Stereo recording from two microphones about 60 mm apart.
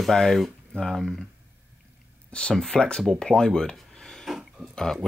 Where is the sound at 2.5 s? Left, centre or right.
Centre.